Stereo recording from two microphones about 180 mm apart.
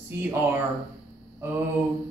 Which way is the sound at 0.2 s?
10° right (ahead or behind).